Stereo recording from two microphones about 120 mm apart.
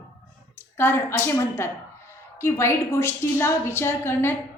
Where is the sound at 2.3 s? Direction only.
20° left (ahead or behind).